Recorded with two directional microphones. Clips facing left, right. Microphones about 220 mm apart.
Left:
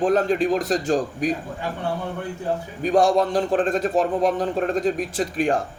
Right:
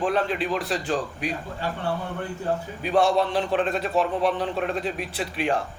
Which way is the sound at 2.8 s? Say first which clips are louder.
Left 4 dB; 45° left (ahead or behind).